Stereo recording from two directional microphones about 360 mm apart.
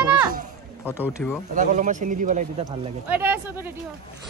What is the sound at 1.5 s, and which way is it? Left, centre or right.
Speech, right.